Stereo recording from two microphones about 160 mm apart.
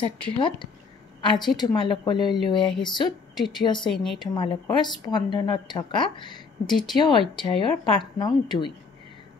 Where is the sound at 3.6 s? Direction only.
30° left (ahead or behind).